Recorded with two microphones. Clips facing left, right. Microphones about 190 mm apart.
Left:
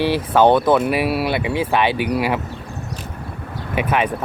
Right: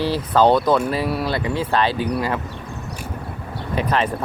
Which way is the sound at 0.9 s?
70° left (ahead or behind).